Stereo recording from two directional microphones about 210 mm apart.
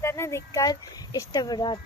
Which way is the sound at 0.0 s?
10° left (ahead or behind).